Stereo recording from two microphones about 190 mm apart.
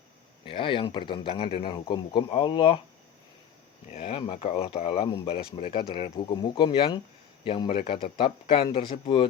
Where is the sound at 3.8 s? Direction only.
35° left (ahead or behind).